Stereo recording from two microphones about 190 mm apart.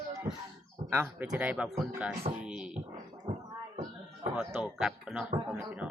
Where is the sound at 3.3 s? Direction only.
35° right (ahead or behind).